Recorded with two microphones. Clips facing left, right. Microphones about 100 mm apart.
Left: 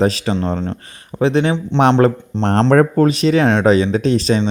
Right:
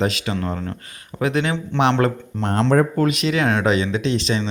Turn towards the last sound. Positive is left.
turn(degrees=40)  # may be behind; listen again after turning